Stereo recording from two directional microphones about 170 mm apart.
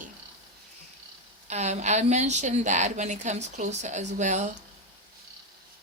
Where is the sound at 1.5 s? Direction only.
40° right (ahead or behind).